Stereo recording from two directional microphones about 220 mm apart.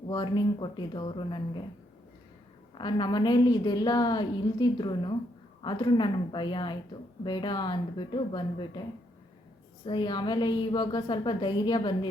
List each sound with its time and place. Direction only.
0.1 s a woman's voice: 20° left (ahead or behind)
2.7 s a woman's voice: 20° left (ahead or behind)
9.8 s a woman's voice: 20° left (ahead or behind)